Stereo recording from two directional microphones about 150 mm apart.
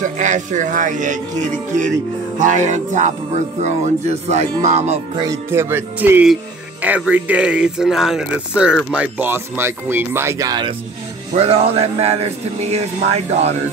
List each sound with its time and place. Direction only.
0.0 s speech: 55° right (ahead or behind)
2.3 s a man's voice: 55° right (ahead or behind)
5.1 s speech: 25° right (ahead or behind)
11.3 s a man's voice: 40° right (ahead or behind)